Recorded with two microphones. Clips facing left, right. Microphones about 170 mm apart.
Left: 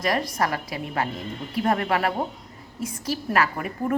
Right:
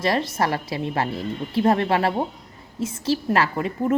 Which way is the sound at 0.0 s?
30° right (ahead or behind).